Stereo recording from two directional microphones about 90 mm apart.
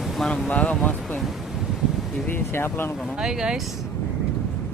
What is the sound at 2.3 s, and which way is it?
Speech, 25° left (ahead or behind).